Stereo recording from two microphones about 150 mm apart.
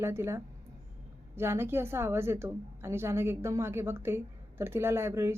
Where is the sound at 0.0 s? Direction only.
15° right (ahead or behind).